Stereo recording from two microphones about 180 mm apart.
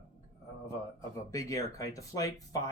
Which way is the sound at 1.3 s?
20° left (ahead or behind).